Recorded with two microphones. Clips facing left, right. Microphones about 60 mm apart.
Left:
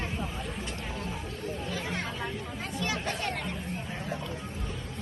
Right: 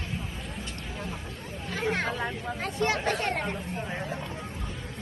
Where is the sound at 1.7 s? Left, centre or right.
Right.